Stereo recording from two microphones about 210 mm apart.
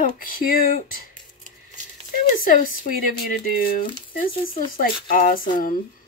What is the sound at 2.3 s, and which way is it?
Speech, 40° left (ahead or behind).